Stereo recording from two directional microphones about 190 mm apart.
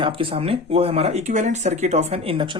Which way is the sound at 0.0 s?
25° right (ahead or behind).